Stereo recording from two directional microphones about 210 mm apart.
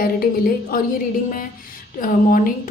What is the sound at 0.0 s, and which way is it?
Speech, 45° left (ahead or behind).